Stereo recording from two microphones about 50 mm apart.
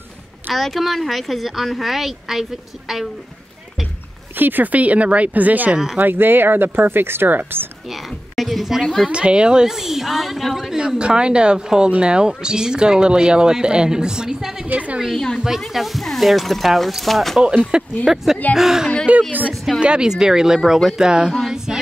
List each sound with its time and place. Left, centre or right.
0.5 s speech: centre
4.4 s speech: right
8.4 s speech: centre
9.0 s speech: right; by 10.8 s centre
10.8 s speech: centre
14.7 s speech: right
15.3 s speech: centre
17.6 s speech: centre
19.1 s speech: right
21.3 s a sound: centre